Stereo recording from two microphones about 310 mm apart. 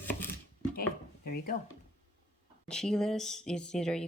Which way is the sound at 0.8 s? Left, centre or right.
Left.